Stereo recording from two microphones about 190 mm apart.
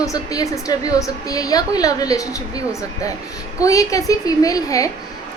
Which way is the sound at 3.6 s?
15° left (ahead or behind).